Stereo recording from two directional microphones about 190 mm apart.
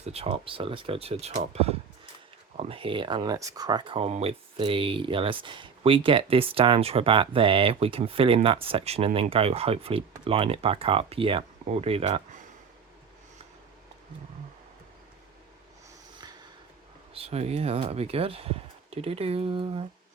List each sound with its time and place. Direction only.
0.0 s speech: 30° right (ahead or behind)
17.2 s speech: 30° right (ahead or behind)